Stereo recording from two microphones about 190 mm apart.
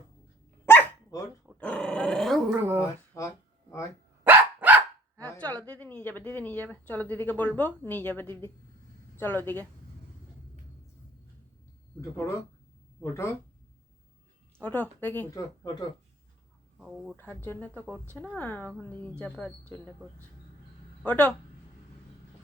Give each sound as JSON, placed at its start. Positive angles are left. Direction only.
{"t": 0.6, "sound": "dog", "side_deg": 10}
{"t": 2.5, "sound": "a sound", "side_deg": -10}
{"t": 3.2, "sound": "a sound", "side_deg": 15}
{"t": 4.2, "sound": "dog", "side_deg": -10}
{"t": 5.6, "sound": "a sound", "side_deg": 5}
{"t": 9.1, "sound": "speech", "side_deg": 10}
{"t": 11.9, "sound": "speech", "side_deg": 15}
{"t": 14.6, "sound": "speech", "side_deg": 10}
{"t": 16.7, "sound": "speech", "side_deg": 0}
{"t": 17.2, "sound": "speech", "side_deg": 10}